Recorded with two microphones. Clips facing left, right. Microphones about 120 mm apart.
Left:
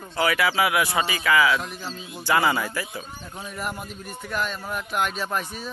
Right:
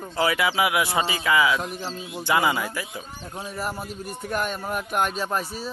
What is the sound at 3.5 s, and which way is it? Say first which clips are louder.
Speech: right 1 dB; 35° right (ahead or behind).